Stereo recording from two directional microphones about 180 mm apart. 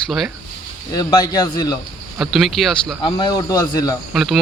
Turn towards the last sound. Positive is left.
turn(degrees=-5)  # may be behind; listen again after turning